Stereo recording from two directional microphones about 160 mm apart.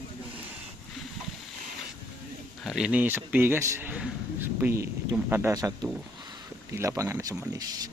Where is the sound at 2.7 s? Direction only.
5° right (ahead or behind); by 7.6 s 20° right (ahead or behind).